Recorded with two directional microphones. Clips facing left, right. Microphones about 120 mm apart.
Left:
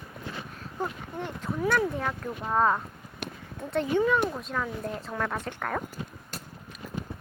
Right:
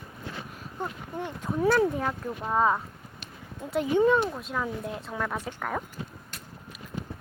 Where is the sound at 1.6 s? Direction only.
25° right (ahead or behind).